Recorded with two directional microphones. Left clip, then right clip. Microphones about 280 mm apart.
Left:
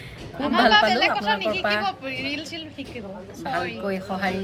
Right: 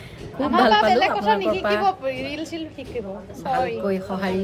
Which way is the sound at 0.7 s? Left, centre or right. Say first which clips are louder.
Left 1 dB; right.